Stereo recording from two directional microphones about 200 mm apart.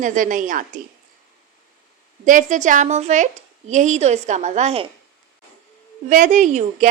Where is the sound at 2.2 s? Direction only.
40° right (ahead or behind).